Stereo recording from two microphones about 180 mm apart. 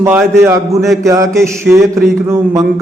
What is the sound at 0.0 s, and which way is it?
Mantra, 10° right (ahead or behind).